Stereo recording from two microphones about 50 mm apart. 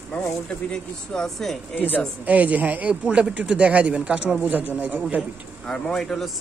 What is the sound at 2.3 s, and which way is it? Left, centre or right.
Speech, right.